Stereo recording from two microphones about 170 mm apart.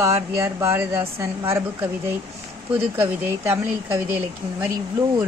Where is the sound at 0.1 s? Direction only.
15° right (ahead or behind).